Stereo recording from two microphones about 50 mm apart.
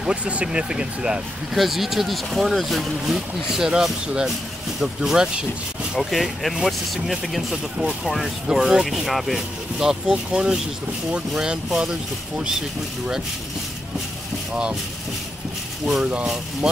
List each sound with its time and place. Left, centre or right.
0.0 s speech: right
1.5 s speech: centre
5.9 s speech: centre
14.5 s speech: right
16.0 s speech: right